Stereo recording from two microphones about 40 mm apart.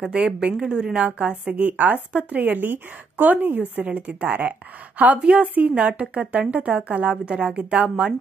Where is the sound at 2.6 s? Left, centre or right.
Right.